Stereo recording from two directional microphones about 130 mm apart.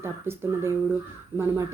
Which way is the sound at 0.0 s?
20° right (ahead or behind).